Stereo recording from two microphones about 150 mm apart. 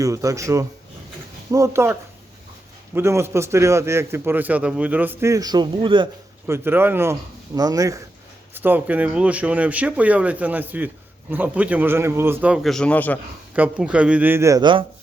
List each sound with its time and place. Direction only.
0.0 s speech: 20° right (ahead or behind)
6.5 s speech: 15° right (ahead or behind); by 13.1 s 10° left (ahead or behind)
13.6 s speech: 10° right (ahead or behind); by 14.8 s 30° right (ahead or behind)